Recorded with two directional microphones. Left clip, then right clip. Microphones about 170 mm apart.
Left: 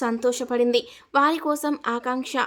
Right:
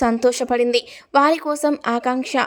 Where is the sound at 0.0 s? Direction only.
30° right (ahead or behind).